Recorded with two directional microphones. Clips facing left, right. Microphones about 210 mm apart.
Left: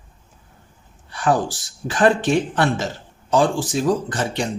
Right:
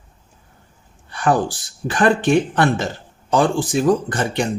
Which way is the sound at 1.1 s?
55° right (ahead or behind).